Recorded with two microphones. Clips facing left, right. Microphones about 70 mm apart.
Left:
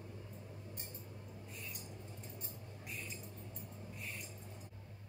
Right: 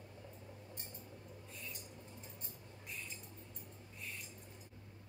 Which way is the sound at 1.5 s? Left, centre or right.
Centre.